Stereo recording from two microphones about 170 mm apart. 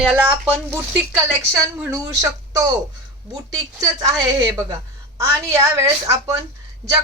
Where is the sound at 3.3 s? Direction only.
20° right (ahead or behind).